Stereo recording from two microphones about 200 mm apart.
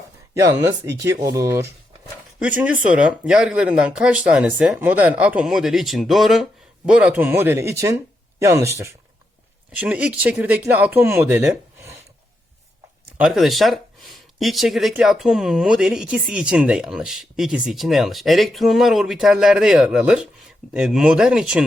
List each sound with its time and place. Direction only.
0.9 s speech: 15° right (ahead or behind)
13.1 s speech: 5° right (ahead or behind)